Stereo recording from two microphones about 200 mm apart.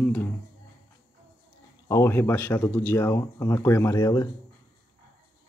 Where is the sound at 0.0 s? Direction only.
10° left (ahead or behind).